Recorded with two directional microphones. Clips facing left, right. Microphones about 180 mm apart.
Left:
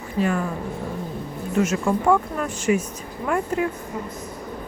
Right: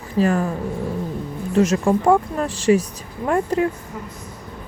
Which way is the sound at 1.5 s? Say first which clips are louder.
Right 4 dB; 35° right (ahead or behind).